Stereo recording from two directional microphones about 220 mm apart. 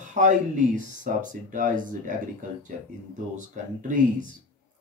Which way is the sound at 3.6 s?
35° right (ahead or behind).